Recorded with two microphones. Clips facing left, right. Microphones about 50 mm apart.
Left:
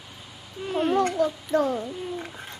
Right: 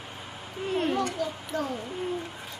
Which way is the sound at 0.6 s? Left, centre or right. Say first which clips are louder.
Even; right.